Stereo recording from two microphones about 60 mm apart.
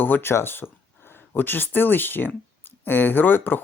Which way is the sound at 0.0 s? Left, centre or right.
Left.